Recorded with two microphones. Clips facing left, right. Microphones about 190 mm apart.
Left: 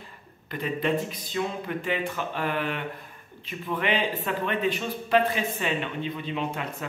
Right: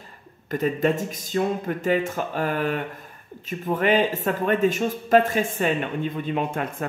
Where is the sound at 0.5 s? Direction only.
45° right (ahead or behind).